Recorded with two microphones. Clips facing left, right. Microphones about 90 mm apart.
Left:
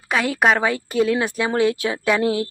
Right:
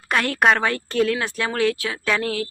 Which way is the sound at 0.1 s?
5° left (ahead or behind).